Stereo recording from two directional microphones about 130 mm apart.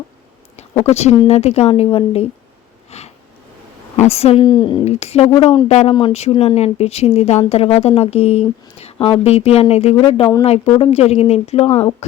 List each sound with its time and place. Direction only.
0.9 s speech: 55° left (ahead or behind)
2.9 s a sound: 60° left (ahead or behind)
3.9 s a woman's voice: 55° left (ahead or behind)
4.4 s speech: 35° left (ahead or behind)
4.9 s speech: 55° left (ahead or behind)